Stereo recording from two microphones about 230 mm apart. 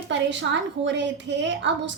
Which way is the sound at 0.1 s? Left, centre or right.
Right.